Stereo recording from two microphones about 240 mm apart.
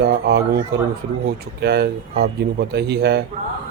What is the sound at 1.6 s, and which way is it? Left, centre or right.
Speech, right.